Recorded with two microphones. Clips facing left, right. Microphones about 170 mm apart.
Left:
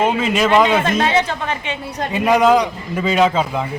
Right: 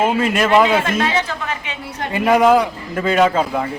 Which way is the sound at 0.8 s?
30° left (ahead or behind).